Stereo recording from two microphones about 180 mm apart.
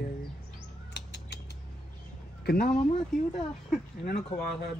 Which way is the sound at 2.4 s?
60° left (ahead or behind).